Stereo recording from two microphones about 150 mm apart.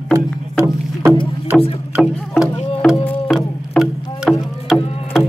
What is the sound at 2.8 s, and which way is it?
Music, 10° left (ahead or behind).